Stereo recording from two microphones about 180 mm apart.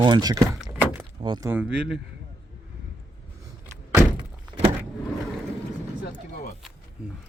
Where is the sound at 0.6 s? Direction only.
5° right (ahead or behind).